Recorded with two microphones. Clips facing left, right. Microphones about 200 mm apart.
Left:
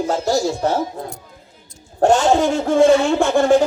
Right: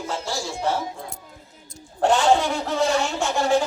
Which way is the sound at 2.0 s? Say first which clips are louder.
Left 4 dB; 45° left (ahead or behind).